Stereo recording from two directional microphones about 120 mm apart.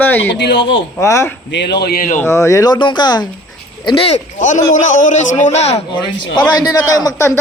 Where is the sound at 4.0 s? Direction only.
75° left (ahead or behind).